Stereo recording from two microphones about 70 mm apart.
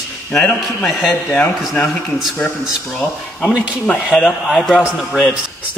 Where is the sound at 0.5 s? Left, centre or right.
Centre.